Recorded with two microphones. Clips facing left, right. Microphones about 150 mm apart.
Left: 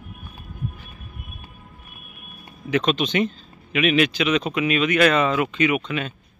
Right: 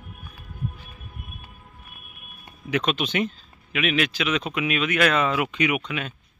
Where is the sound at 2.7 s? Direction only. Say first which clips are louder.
Left 4 dB; 5° right (ahead or behind).